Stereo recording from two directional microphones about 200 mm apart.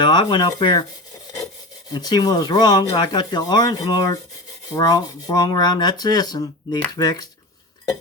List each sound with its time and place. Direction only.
0.0 s speech: 20° left (ahead or behind)
1.9 s speech: 20° left (ahead or behind)